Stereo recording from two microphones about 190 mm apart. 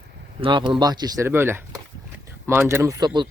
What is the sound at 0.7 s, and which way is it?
Speech, 20° right (ahead or behind).